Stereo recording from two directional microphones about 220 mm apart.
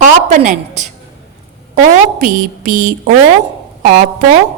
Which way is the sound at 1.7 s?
35° right (ahead or behind).